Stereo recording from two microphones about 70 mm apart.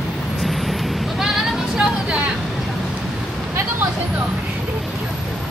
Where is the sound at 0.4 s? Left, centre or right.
Centre.